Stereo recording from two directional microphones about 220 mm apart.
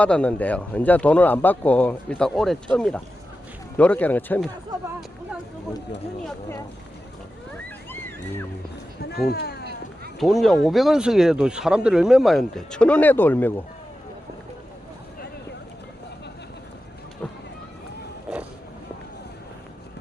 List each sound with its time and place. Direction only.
0.0 s speech: 5° left (ahead or behind)
9.0 s speech: 45° left (ahead or behind)
10.2 s speech: centre (ahead or behind)
18.3 s vehicle: 5° right (ahead or behind)